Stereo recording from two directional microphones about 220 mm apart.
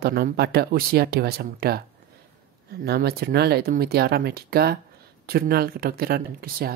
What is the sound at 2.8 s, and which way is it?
Speech, 45° right (ahead or behind).